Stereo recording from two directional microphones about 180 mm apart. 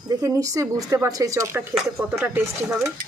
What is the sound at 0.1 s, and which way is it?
Speech, 20° right (ahead or behind).